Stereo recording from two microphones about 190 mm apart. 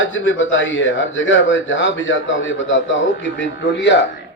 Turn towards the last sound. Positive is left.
turn(degrees=70)  # may be behind; listen again after turning